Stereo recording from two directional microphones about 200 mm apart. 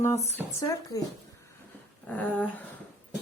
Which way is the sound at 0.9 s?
20° left (ahead or behind).